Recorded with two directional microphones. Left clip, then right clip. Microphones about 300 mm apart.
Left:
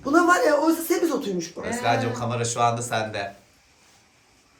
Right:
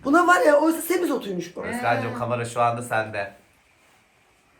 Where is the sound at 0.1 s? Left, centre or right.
Right.